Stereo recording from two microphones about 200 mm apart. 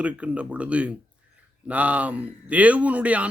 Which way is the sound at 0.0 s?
5° right (ahead or behind).